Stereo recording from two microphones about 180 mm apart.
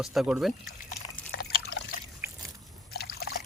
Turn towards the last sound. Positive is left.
turn(degrees=60)  # may be behind; listen again after turning